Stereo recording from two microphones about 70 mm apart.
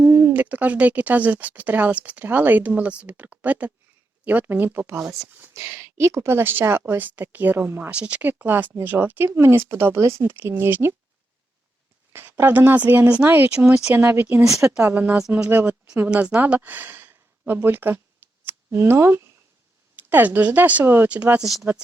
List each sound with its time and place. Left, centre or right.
0.0 s speech: right
5.5 s speech: right; by 8.3 s centre
8.3 s speech: right
10.2 s speech: right
12.1 s speech: right
16.0 s speech: centre
16.4 s a sound: right
18.7 s speech: right
20.0 s speech: right
21.4 s speech: centre